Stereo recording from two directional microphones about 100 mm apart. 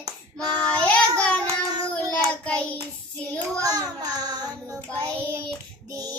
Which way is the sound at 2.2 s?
10° left (ahead or behind).